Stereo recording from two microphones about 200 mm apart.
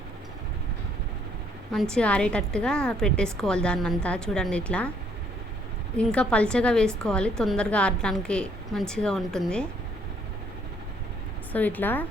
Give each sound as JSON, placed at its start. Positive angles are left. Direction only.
{"t": 1.7, "sound": "a woman's voice", "side_deg": 5}
{"t": 6.0, "sound": "a woman's voice", "side_deg": 5}
{"t": 11.5, "sound": "speech", "side_deg": 10}